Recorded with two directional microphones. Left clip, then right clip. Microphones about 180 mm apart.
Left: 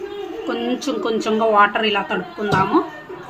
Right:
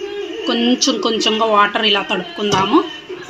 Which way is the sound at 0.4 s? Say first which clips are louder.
Right 7 dB; 15° right (ahead or behind).